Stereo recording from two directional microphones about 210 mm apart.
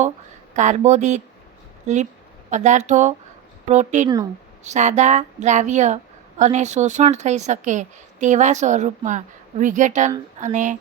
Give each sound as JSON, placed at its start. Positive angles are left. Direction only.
{"t": 0.5, "sound": "a woman's voice", "side_deg": -35}
{"t": 2.5, "sound": "a woman's voice", "side_deg": -35}